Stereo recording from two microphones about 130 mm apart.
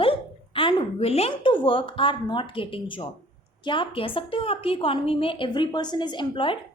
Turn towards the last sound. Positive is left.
turn(degrees=40)  # may be behind; listen again after turning